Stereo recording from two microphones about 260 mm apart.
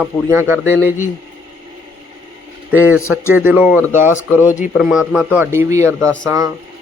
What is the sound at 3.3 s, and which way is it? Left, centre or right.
A man's voice, centre.